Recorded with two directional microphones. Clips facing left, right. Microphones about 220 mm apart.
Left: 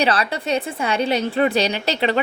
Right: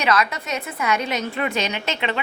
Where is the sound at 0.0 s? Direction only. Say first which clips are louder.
Left 2 dB; 30° left (ahead or behind).